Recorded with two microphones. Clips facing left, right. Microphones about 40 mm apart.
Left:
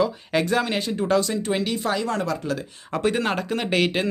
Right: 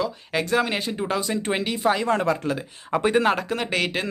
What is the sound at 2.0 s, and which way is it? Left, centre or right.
Speech, right.